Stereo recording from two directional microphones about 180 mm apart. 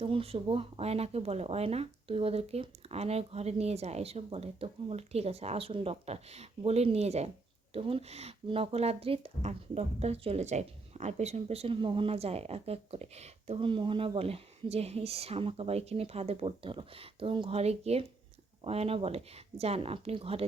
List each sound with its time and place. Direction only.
0.0 s speech: 30° right (ahead or behind)